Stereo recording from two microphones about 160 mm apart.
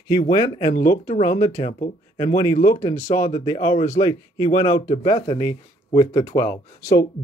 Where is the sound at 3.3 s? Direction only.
40° left (ahead or behind).